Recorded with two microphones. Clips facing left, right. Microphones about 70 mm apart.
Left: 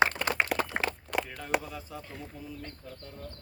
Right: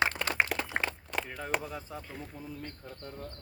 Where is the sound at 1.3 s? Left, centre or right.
Centre.